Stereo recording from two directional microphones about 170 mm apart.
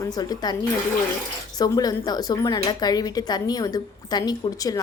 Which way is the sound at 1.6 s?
25° left (ahead or behind).